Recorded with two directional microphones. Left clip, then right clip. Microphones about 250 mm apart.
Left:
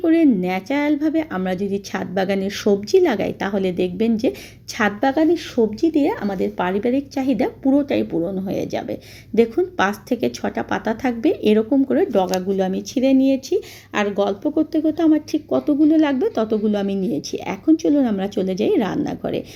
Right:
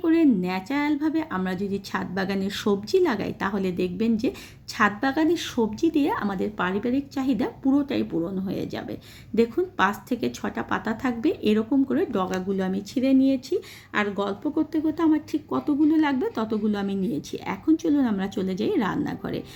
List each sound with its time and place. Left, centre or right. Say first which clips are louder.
0.0 s a woman's voice: left 5 dB; centre